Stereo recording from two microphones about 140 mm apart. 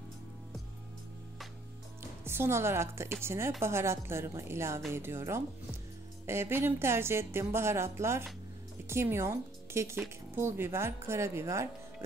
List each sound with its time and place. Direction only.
2.2 s speech: 15° right (ahead or behind)